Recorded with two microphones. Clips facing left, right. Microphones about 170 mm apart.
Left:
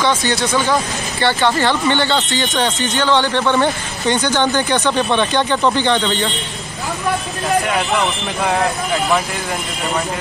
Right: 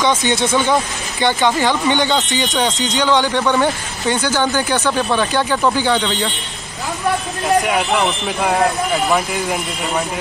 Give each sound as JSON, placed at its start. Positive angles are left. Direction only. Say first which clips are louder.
{"t": 0.0, "sound": "speech", "louder": "right 1 dB", "side_deg": -15}
{"t": 7.6, "sound": "speech", "louder": "right 1 dB", "side_deg": -5}